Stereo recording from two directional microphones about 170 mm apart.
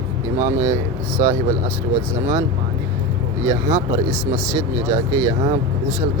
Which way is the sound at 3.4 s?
20° right (ahead or behind).